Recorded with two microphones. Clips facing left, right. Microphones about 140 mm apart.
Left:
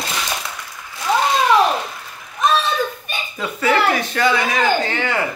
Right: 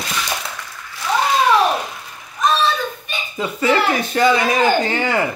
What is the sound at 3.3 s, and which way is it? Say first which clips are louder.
Speech: right 1 dB; 20° right (ahead or behind).